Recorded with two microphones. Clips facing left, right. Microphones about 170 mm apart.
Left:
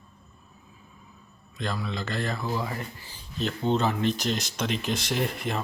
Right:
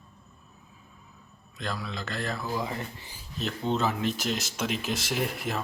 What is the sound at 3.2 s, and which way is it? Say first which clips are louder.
Speech: left 3 dB; centre (ahead or behind).